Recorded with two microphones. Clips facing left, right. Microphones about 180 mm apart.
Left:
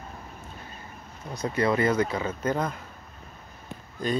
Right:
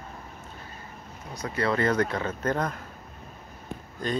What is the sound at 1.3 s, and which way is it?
Speech, 25° left (ahead or behind).